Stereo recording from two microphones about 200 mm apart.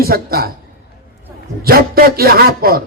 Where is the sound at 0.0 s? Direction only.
50° right (ahead or behind).